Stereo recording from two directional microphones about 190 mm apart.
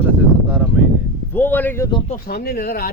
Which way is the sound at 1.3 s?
10° left (ahead or behind).